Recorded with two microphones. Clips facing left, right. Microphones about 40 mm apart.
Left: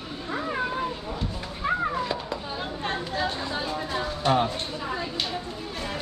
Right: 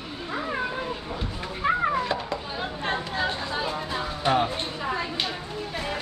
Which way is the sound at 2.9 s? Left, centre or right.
Centre.